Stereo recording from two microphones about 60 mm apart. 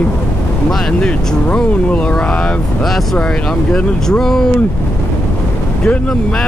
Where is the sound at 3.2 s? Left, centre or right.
Centre.